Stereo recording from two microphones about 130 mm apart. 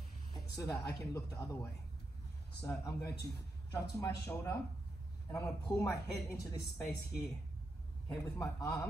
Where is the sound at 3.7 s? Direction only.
25° left (ahead or behind).